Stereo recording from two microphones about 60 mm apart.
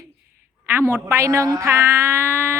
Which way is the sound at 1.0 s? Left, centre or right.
Right.